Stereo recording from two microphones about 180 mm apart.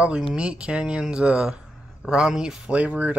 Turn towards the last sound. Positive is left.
turn(degrees=-10)  # may be behind; listen again after turning